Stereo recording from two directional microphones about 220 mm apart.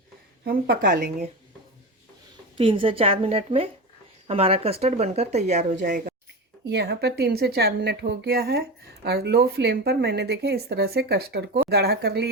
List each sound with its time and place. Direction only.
0.4 s speech: 40° right (ahead or behind)
2.6 s speech: 25° right (ahead or behind)
6.7 s speech: 50° right (ahead or behind)